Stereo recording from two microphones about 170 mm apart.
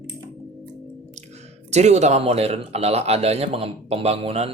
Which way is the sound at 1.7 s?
40° right (ahead or behind).